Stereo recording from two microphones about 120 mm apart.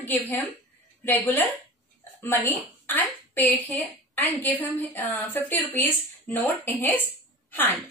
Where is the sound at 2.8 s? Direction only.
15° left (ahead or behind).